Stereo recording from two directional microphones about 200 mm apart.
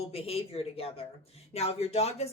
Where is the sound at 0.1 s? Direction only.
30° left (ahead or behind).